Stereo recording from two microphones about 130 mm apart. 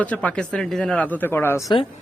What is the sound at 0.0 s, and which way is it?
A man's voice, 10° left (ahead or behind).